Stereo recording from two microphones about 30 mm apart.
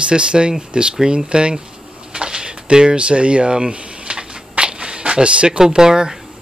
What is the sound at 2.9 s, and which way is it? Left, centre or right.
Speech, right.